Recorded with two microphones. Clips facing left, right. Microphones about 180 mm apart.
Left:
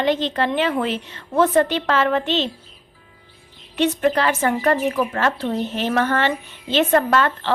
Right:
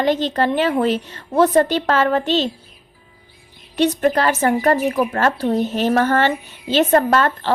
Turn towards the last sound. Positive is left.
turn(degrees=-40)  # may be behind; listen again after turning